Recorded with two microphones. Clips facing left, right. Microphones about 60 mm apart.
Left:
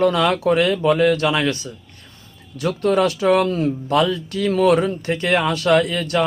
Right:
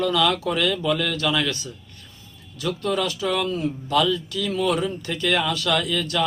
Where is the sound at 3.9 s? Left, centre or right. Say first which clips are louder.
Left 1 dB; left.